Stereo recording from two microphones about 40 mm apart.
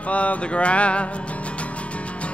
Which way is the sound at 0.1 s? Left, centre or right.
Left.